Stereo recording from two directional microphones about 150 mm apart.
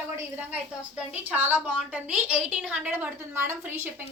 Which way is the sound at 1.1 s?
10° right (ahead or behind).